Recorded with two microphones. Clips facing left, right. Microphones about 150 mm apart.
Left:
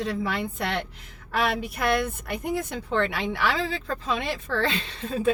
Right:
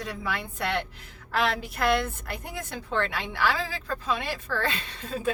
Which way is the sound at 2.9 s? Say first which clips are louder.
Left 3 dB; 20° left (ahead or behind).